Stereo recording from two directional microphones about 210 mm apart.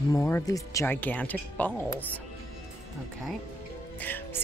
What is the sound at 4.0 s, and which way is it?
Speech, 10° left (ahead or behind).